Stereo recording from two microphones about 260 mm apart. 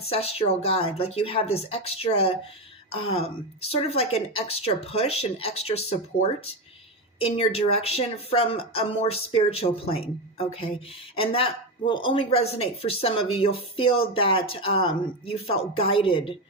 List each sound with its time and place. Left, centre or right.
0.0 s speech: left
7.2 s speech: left